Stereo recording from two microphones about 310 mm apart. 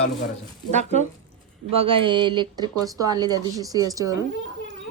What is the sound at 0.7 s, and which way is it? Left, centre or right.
Speech, right.